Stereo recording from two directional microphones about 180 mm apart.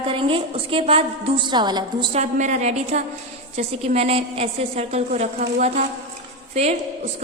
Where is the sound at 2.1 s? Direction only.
40° right (ahead or behind).